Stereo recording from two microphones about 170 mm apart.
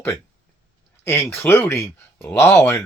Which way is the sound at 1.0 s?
35° left (ahead or behind).